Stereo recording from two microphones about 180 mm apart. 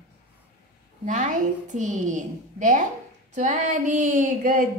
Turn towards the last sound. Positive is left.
turn(degrees=-50)  # may be behind; listen again after turning